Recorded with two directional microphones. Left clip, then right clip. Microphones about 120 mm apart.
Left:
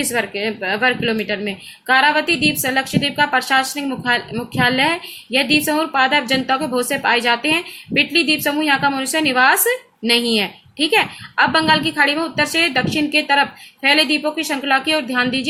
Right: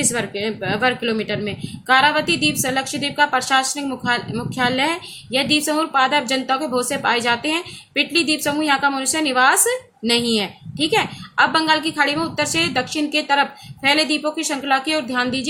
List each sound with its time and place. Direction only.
0.0 s a woman's voice: 15° left (ahead or behind)